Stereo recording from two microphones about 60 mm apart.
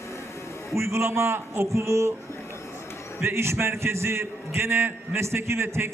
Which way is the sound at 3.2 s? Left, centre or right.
Right.